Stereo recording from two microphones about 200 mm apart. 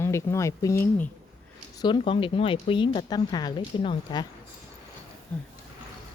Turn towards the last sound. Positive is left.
turn(degrees=10)  # may be behind; listen again after turning